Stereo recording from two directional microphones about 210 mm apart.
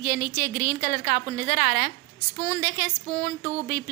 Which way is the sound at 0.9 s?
45° left (ahead or behind).